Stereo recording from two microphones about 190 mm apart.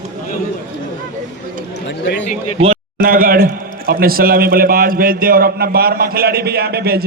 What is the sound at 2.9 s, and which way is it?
A man's voice, 50° right (ahead or behind).